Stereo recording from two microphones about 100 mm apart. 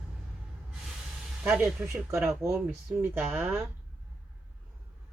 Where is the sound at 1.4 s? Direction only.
5° right (ahead or behind).